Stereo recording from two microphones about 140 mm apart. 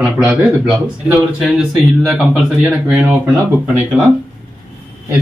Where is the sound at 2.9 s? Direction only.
15° right (ahead or behind).